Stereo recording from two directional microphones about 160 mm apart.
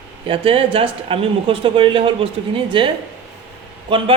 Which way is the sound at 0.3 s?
35° right (ahead or behind).